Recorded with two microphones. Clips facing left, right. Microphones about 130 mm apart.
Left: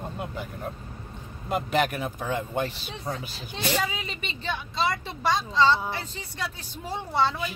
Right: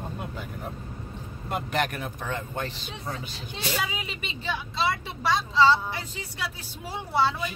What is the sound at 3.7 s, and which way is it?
Speech, 10° right (ahead or behind).